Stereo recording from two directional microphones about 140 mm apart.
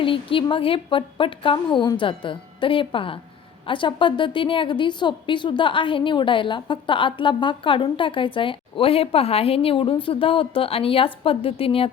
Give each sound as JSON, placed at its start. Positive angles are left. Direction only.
{"t": 0.0, "sound": "a woman's voice", "side_deg": 40}